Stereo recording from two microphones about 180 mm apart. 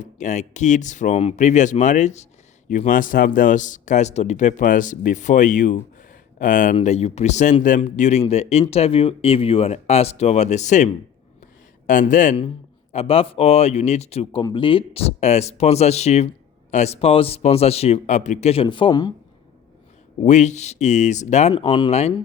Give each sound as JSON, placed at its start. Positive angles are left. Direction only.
{"t": 0.0, "sound": "a man's voice", "side_deg": 40}
{"t": 12.9, "sound": "speech", "side_deg": 35}
{"t": 20.2, "sound": "speech", "side_deg": 40}
{"t": 21.5, "sound": "speech", "side_deg": 25}